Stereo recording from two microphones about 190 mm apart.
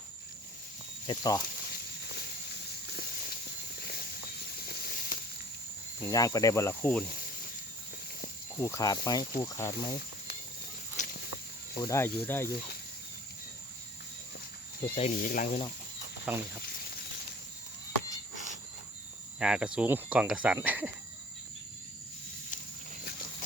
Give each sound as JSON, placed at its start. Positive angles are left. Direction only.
{"t": 1.0, "sound": "speech", "side_deg": 20}
{"t": 1.7, "sound": "a sound", "side_deg": 55}
{"t": 2.8, "sound": "walk", "side_deg": 55}
{"t": 4.5, "sound": "a sound", "side_deg": 55}
{"t": 6.0, "sound": "speech", "side_deg": 20}
{"t": 8.6, "sound": "speech", "side_deg": 15}
{"t": 10.9, "sound": "walk", "side_deg": 45}
{"t": 11.8, "sound": "speech", "side_deg": 15}
{"t": 14.9, "sound": "speech", "side_deg": 40}
{"t": 16.3, "sound": "speech", "side_deg": -5}
{"t": 19.4, "sound": "speech", "side_deg": -5}